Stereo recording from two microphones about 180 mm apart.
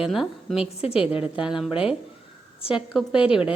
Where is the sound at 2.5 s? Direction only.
30° left (ahead or behind).